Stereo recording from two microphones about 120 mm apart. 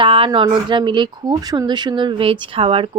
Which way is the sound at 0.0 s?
50° right (ahead or behind).